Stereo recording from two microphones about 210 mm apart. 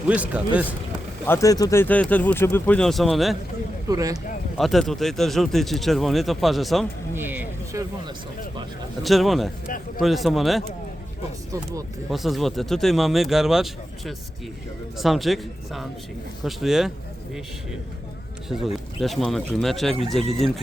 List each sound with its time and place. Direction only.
0.1 s speech: 5° right (ahead or behind)
1.3 s speech: 15° left (ahead or behind); by 3.3 s centre (ahead or behind)
3.8 s speech: 15° right (ahead or behind)
4.5 s speech: centre (ahead or behind)
9.0 s speech: centre (ahead or behind)
11.5 s speech: 15° right (ahead or behind)
12.1 s speech: centre (ahead or behind)
18.4 s speech: centre (ahead or behind)